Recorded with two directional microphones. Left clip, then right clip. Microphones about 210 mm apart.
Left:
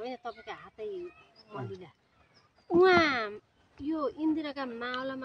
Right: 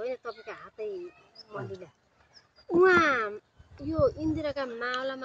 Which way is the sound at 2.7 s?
40° left (ahead or behind).